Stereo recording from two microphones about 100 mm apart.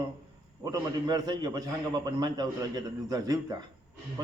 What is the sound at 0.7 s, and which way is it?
A man's voice, 40° right (ahead or behind).